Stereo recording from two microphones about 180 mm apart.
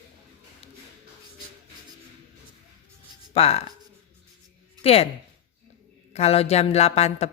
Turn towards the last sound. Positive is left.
turn(degrees=35)  # may be behind; listen again after turning